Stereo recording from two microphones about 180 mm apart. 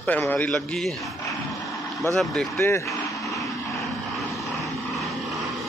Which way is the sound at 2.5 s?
15° left (ahead or behind).